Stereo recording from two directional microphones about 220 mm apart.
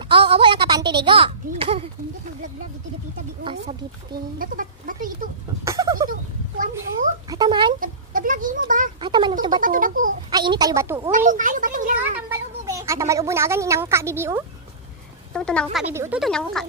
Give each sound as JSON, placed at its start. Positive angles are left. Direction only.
{"t": 0.1, "sound": "speech", "side_deg": -25}
{"t": 4.4, "sound": "speech", "side_deg": -40}
{"t": 5.6, "sound": "a sound", "side_deg": -15}
{"t": 7.2, "sound": "a sound", "side_deg": -20}
{"t": 7.8, "sound": "goat", "side_deg": -40}
{"t": 9.0, "sound": "a sound", "side_deg": -20}
{"t": 9.6, "sound": "a sound", "side_deg": -40}
{"t": 10.3, "sound": "a woman's voice", "side_deg": -20}
{"t": 11.1, "sound": "speech", "side_deg": -35}
{"t": 12.3, "sound": "speech", "side_deg": -15}
{"t": 15.3, "sound": "speech", "side_deg": 5}
{"t": 15.9, "sound": "a woman's voice", "side_deg": -10}
{"t": 16.2, "sound": "speech", "side_deg": 0}